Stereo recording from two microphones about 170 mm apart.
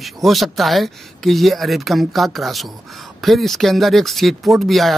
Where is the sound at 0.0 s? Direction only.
Centre (ahead or behind).